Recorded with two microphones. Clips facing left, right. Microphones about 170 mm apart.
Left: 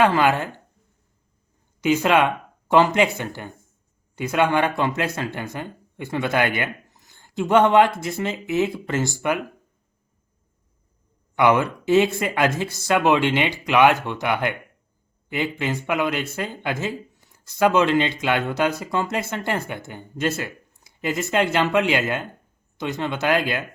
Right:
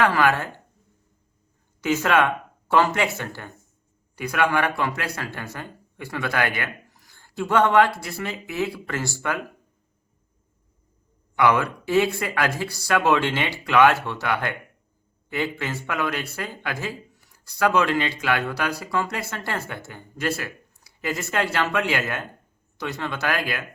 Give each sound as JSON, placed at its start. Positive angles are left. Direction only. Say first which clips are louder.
{"t": 0.0, "sound": "speech", "louder": "left 2 dB", "side_deg": 20}
{"t": 1.8, "sound": "speech", "louder": "left 2 dB", "side_deg": 20}
{"t": 11.3, "sound": "speech", "louder": "left 2 dB", "side_deg": 20}